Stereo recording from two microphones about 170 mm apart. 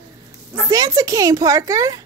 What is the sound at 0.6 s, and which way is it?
Speech, 20° right (ahead or behind).